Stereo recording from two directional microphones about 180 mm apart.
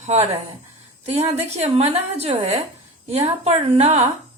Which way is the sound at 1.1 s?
35° right (ahead or behind).